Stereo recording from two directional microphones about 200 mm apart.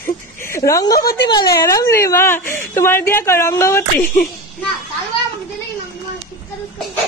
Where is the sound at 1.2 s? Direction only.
20° left (ahead or behind).